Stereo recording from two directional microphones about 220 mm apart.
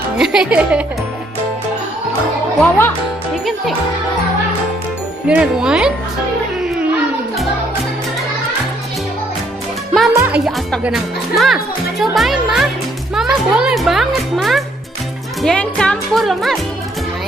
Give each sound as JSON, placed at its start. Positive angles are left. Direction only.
{"t": 0.2, "sound": "speech", "side_deg": -5}
{"t": 2.6, "sound": "a child's voice", "side_deg": 10}
{"t": 5.3, "sound": "speech", "side_deg": -5}
{"t": 6.7, "sound": "music", "side_deg": -5}
{"t": 10.2, "sound": "speech", "side_deg": -5}